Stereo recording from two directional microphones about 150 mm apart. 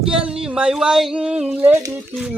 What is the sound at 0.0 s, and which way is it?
Speech, 5° right (ahead or behind).